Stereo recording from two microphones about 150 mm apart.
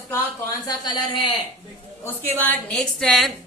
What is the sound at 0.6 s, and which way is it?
Speech, 35° left (ahead or behind).